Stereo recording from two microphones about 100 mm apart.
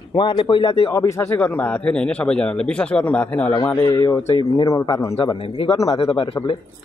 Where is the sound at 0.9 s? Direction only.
30° left (ahead or behind).